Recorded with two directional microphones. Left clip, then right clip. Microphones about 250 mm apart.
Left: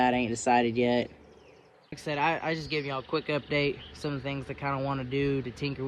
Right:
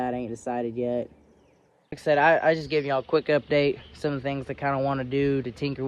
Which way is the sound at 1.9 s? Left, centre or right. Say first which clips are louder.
Right 9 dB; centre.